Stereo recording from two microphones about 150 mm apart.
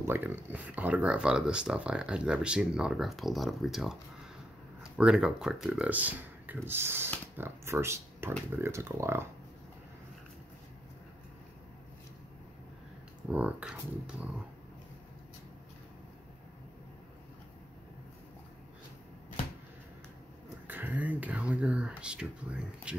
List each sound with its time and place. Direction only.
0.0 s speech: 15° right (ahead or behind)
13.3 s speech: 10° right (ahead or behind)
20.6 s speech: 10° right (ahead or behind)